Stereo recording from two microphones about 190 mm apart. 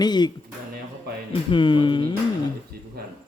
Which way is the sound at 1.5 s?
25° left (ahead or behind).